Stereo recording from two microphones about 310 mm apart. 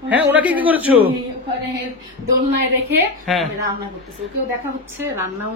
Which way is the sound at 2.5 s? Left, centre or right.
Right.